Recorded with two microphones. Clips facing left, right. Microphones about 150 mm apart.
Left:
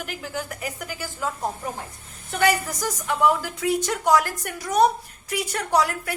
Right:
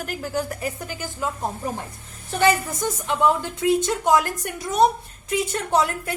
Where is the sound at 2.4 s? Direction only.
25° right (ahead or behind).